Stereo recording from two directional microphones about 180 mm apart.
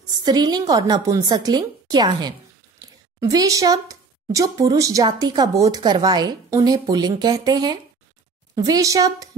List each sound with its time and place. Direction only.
0.2 s speech: 20° right (ahead or behind)